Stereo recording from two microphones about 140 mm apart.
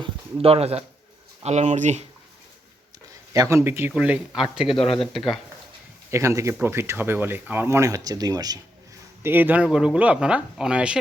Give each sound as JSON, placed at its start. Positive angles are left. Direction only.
{"t": 0.4, "sound": "speech", "side_deg": -45}
{"t": 3.3, "sound": "speech", "side_deg": -20}
{"t": 3.9, "sound": "speech", "side_deg": -5}
{"t": 6.1, "sound": "speech", "side_deg": -20}
{"t": 9.2, "sound": "speech", "side_deg": -15}